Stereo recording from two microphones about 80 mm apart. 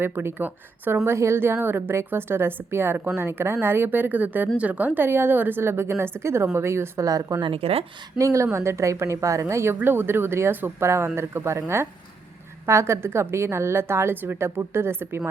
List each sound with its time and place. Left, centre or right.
0.0 s a woman's voice: right
7.1 s a woman's voice: right